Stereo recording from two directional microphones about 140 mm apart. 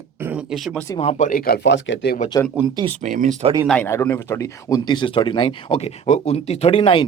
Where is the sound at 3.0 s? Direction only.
70° right (ahead or behind).